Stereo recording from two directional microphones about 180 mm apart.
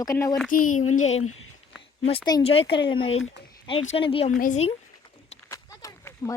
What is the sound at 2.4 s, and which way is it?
Speech, 30° left (ahead or behind).